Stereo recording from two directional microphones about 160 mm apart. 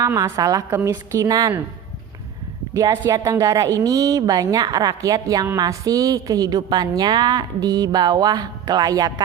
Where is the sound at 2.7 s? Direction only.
25° right (ahead or behind).